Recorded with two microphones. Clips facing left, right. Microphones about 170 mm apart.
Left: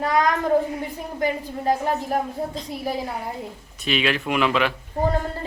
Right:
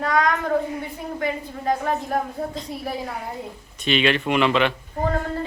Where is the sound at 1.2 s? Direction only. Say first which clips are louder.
Left 3 dB; 30° left (ahead or behind).